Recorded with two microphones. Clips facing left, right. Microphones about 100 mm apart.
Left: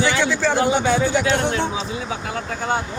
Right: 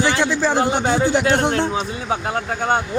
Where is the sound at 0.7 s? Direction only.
45° right (ahead or behind).